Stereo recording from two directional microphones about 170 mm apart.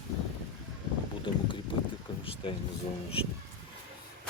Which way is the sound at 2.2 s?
30° left (ahead or behind).